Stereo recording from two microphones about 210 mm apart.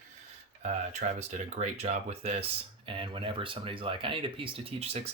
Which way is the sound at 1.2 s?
30° right (ahead or behind).